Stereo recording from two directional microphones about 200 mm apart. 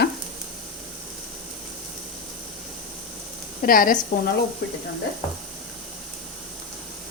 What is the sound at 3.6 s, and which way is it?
Speech, 45° left (ahead or behind).